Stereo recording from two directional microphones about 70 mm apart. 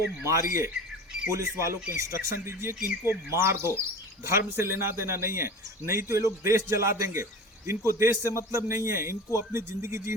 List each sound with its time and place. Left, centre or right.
0.3 s a man's voice: right